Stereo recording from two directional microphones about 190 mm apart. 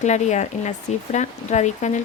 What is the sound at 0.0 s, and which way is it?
Speech, 40° left (ahead or behind).